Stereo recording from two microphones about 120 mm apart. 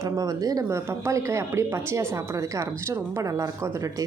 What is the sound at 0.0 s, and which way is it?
A woman's voice, 30° right (ahead or behind).